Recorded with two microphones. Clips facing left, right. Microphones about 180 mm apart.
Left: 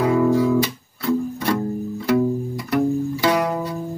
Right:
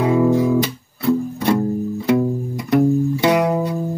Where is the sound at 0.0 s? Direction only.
20° right (ahead or behind).